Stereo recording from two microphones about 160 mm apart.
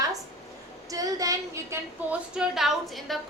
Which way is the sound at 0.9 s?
20° right (ahead or behind).